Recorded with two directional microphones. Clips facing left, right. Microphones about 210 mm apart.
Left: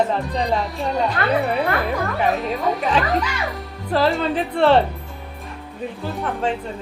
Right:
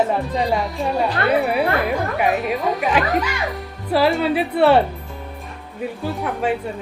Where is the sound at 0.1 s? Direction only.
5° right (ahead or behind).